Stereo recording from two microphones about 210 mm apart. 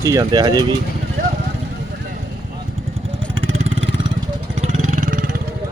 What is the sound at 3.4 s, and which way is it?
Vehicle, 65° right (ahead or behind).